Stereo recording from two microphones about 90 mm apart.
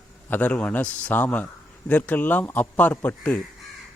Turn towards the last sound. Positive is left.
turn(degrees=20)  # may be behind; listen again after turning